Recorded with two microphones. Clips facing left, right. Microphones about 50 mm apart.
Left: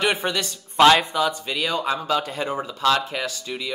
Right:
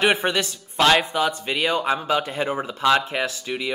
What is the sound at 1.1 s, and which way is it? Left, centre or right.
A man's voice, right.